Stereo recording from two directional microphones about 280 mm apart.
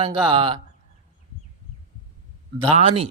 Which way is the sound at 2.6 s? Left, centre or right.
Right.